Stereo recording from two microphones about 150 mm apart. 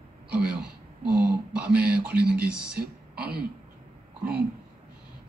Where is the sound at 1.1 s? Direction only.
5° right (ahead or behind).